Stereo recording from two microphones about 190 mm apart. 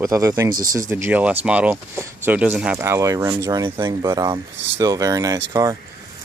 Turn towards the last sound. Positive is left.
turn(degrees=-20)  # may be behind; listen again after turning